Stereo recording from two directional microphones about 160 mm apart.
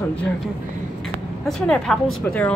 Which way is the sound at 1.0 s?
Centre (ahead or behind).